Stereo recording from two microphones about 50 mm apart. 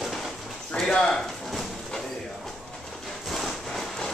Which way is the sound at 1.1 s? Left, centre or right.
Centre.